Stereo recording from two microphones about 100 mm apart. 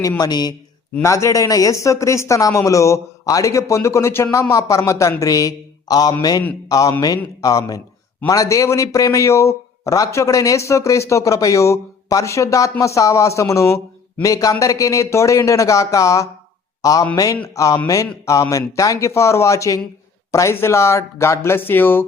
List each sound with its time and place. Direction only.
0.2 s speech: 45° left (ahead or behind)
1.0 s a man's voice: 30° left (ahead or behind)